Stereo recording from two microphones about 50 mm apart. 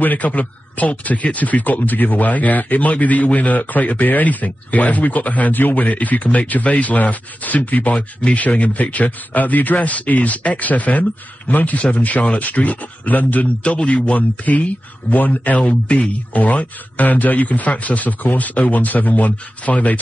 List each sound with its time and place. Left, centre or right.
0.0 s speech: left